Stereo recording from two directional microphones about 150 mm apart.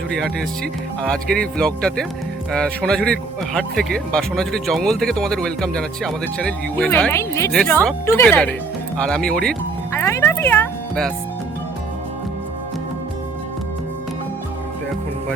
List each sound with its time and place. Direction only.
0.2 s a man's voice: 5° left (ahead or behind)
9.9 s speech: 20° left (ahead or behind)